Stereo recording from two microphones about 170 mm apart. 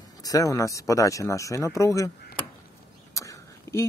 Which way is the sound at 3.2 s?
20° left (ahead or behind).